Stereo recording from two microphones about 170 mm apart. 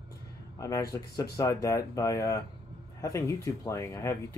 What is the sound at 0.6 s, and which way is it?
Speech, 20° left (ahead or behind).